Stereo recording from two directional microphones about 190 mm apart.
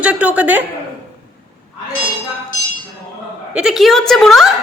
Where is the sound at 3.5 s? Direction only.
5° right (ahead or behind).